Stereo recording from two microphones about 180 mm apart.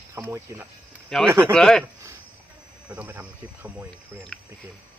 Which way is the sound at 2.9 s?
10° right (ahead or behind).